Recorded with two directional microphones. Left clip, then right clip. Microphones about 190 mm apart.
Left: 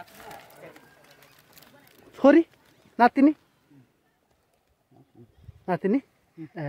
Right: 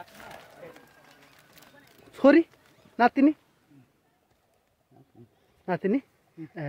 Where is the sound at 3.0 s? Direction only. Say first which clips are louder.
Left 2 dB; 20° left (ahead or behind).